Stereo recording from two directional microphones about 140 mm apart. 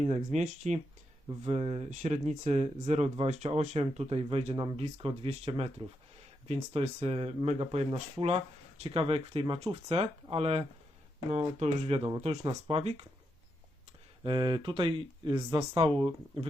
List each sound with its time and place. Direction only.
0.0 s speech: 55° right (ahead or behind)
1.5 s speech: 45° right (ahead or behind)
14.3 s speech: 35° right (ahead or behind)